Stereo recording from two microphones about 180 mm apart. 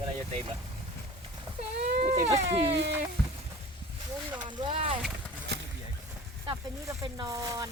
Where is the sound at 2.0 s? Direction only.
40° right (ahead or behind).